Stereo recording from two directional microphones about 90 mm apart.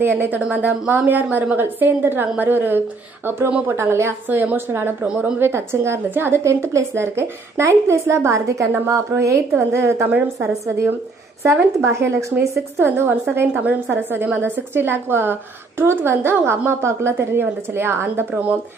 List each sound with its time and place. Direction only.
0.0 s a woman's voice: 20° right (ahead or behind)
3.7 s a woman's voice: 30° right (ahead or behind)
4.3 s a woman's voice: 20° right (ahead or behind)
13.5 s a woman's voice: 15° right (ahead or behind)